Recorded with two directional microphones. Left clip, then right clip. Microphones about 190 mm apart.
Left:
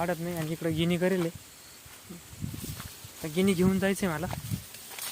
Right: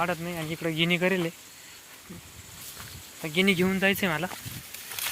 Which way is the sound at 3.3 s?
5° left (ahead or behind).